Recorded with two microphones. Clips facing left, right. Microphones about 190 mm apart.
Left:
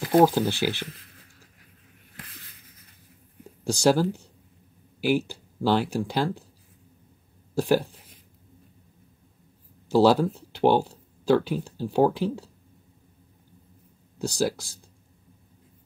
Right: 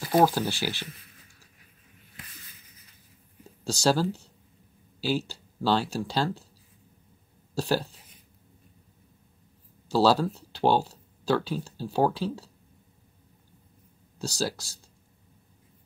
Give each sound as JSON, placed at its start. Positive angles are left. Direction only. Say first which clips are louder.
{"t": 0.2, "sound": "speech", "louder": "left 3 dB", "side_deg": 15}
{"t": 0.7, "sound": "a sound", "louder": "left 4 dB", "side_deg": 55}
{"t": 3.6, "sound": "speech", "louder": "left 3 dB", "side_deg": 15}
{"t": 7.5, "sound": "speech", "louder": "left 5 dB", "side_deg": 15}
{"t": 9.9, "sound": "speech", "louder": "left 3 dB", "side_deg": 15}
{"t": 14.4, "sound": "speech", "louder": "left 5 dB", "side_deg": 15}